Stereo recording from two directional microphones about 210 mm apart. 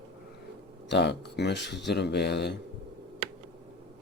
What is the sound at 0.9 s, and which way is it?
Speech, 55° left (ahead or behind).